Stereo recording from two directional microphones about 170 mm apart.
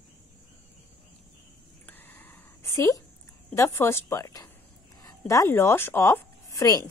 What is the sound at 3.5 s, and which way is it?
A woman's voice, 15° left (ahead or behind).